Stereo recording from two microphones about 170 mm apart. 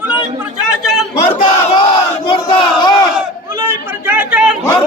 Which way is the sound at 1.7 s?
30° left (ahead or behind).